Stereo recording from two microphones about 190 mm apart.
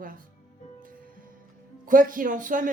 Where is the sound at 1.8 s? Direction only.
45° right (ahead or behind).